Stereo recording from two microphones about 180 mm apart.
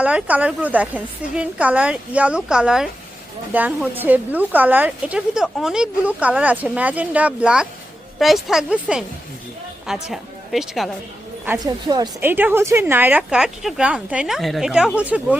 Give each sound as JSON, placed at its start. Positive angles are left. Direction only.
{"t": 0.0, "sound": "a woman's voice", "side_deg": -10}
{"t": 11.6, "sound": "a woman's voice", "side_deg": -20}
{"t": 12.2, "sound": "speech", "side_deg": -10}